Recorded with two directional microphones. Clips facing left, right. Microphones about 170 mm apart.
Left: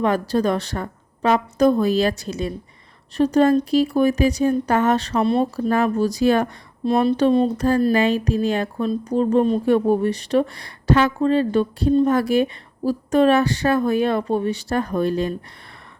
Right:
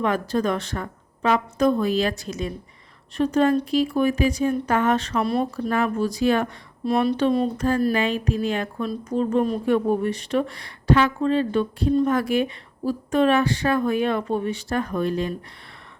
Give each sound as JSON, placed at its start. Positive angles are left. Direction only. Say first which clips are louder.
{"t": 0.0, "sound": "speech", "louder": "left 3 dB", "side_deg": 35}